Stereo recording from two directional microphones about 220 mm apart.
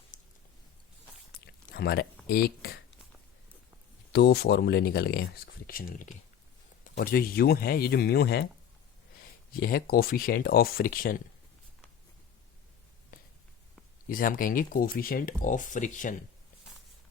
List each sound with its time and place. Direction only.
0.1 s a sound: 35° left (ahead or behind)
1.7 s speech: 45° left (ahead or behind)
4.1 s speech: 45° left (ahead or behind)
9.6 s speech: 40° left (ahead or behind)
14.1 s speech: 40° left (ahead or behind)